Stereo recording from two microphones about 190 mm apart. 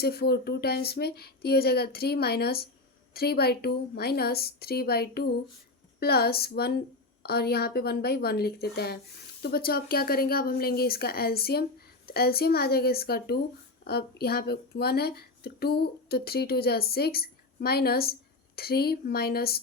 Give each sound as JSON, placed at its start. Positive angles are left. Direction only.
{"t": 0.0, "sound": "speech", "side_deg": 55}